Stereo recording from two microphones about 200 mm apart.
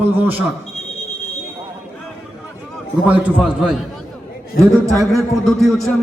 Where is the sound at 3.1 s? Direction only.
10° right (ahead or behind).